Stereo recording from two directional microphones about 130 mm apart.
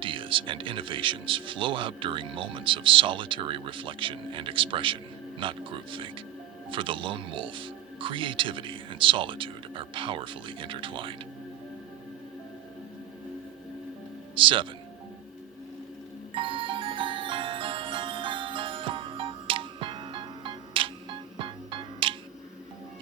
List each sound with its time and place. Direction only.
0.0 s speech: 40° right (ahead or behind)
14.3 s speech: 40° right (ahead or behind)
16.3 s music: 40° right (ahead or behind)